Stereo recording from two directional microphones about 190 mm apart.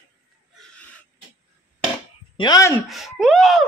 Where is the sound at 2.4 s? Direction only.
20° left (ahead or behind).